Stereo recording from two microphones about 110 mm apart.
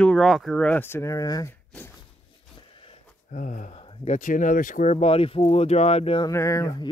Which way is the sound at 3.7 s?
70° left (ahead or behind).